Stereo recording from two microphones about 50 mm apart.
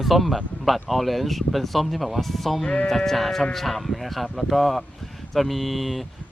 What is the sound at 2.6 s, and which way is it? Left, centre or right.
Speech, centre.